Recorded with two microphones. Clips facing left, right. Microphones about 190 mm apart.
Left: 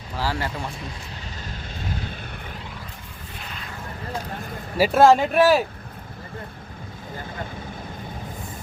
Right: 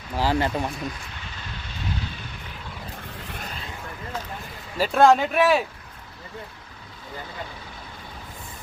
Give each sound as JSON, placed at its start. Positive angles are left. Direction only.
{"t": 0.2, "sound": "speech", "side_deg": -20}
{"t": 3.3, "sound": "a sound", "side_deg": -45}
{"t": 4.8, "sound": "speech", "side_deg": 5}